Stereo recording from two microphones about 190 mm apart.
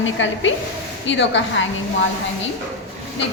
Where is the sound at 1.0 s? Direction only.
70° left (ahead or behind).